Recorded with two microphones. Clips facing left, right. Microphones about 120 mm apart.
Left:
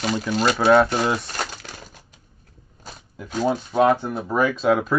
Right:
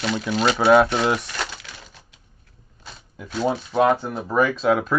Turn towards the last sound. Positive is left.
turn(degrees=0)  # may be behind; listen again after turning